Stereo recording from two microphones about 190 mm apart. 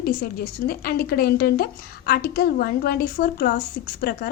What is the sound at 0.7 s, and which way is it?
Speech, 55° left (ahead or behind).